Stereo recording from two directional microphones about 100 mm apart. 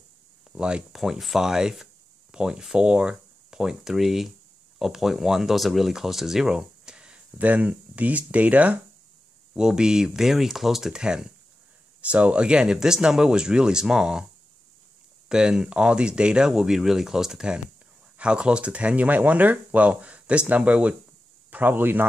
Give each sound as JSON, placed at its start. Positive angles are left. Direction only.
{"t": 0.6, "sound": "speech", "side_deg": -10}
{"t": 15.2, "sound": "speech", "side_deg": -10}